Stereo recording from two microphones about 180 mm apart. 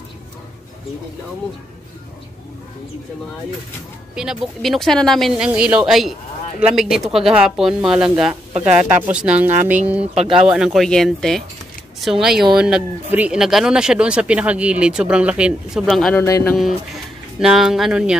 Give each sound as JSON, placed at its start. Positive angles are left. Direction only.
{"t": 4.1, "sound": "speech", "side_deg": -5}
{"t": 10.1, "sound": "speech", "side_deg": -30}
{"t": 10.4, "sound": "speech", "side_deg": -5}
{"t": 16.2, "sound": "speech", "side_deg": 15}
{"t": 16.5, "sound": "speech", "side_deg": 0}